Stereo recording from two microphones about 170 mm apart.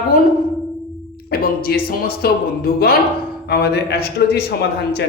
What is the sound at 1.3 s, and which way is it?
A man's voice, 65° left (ahead or behind).